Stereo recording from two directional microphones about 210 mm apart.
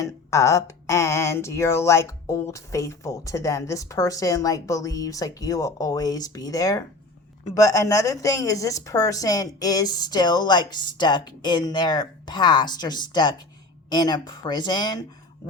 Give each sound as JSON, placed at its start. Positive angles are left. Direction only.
{"t": 0.0, "sound": "a woman's voice", "side_deg": 15}